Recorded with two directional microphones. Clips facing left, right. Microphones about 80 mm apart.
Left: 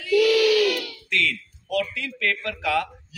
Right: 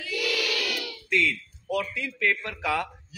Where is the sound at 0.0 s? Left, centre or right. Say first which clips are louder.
Left 12 dB; centre.